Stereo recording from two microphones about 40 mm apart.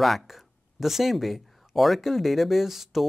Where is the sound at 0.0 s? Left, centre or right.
Centre.